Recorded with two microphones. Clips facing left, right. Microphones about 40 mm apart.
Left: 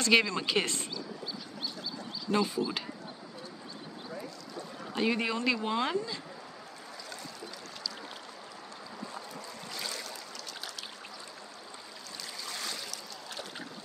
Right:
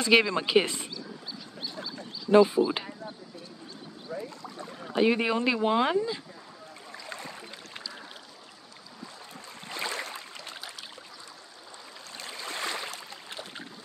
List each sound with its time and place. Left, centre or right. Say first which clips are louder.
0.0 s speech: right 3 dB; centre
2.3 s speech: right 10 dB; right
4.1 s boat: right 6 dB; right
4.7 s speech: right 6 dB; centre
9.7 s a sound: right 7 dB; right
12.2 s stream: right 5 dB; right